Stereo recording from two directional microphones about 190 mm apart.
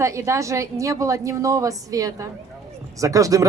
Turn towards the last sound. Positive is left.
turn(degrees=-15)  # may be behind; listen again after turning